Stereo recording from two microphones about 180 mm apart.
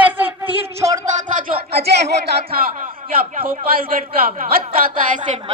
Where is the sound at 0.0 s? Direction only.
10° right (ahead or behind).